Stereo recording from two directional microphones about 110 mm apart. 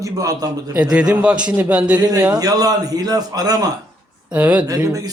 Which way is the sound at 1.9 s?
35° right (ahead or behind).